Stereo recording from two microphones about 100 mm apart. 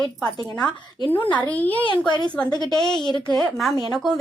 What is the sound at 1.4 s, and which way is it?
Speech, 15° left (ahead or behind).